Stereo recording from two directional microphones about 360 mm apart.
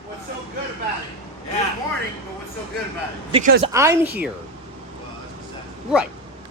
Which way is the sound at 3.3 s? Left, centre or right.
Right.